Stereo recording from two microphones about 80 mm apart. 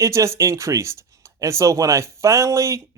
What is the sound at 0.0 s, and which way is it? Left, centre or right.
Speech, right.